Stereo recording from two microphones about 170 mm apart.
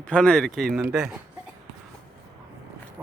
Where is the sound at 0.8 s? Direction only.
5° right (ahead or behind).